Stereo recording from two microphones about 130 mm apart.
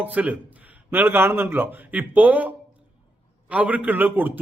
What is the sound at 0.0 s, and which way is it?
Speech, 10° right (ahead or behind).